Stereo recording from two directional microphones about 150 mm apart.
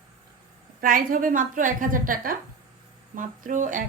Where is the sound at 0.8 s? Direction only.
65° right (ahead or behind).